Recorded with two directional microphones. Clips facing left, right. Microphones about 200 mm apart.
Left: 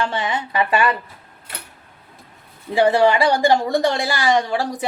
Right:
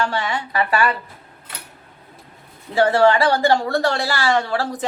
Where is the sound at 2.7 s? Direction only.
15° left (ahead or behind).